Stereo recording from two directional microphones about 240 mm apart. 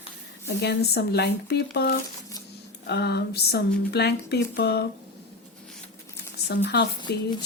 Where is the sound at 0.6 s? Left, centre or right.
Left.